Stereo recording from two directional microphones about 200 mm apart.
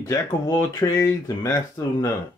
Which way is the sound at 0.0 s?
15° left (ahead or behind).